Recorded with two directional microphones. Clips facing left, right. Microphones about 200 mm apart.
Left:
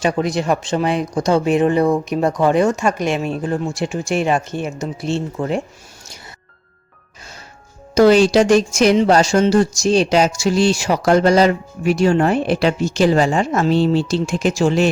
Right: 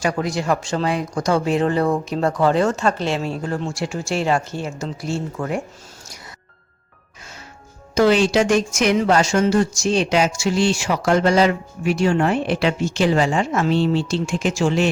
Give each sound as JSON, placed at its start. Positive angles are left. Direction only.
{"t": 0.0, "sound": "speech", "side_deg": 20}
{"t": 7.9, "sound": "speech", "side_deg": 40}